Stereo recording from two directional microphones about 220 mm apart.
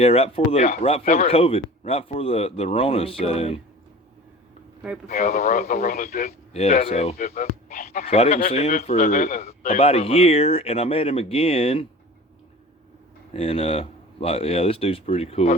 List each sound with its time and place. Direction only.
0.0 s a man's voice: 25° left (ahead or behind)
5.0 s a man's voice: 40° left (ahead or behind)
7.2 s a man's voice: 40° left (ahead or behind)
13.3 s a man's voice: 25° left (ahead or behind)